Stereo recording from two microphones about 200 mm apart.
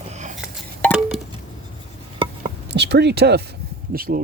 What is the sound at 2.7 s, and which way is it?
Speech, 55° right (ahead or behind).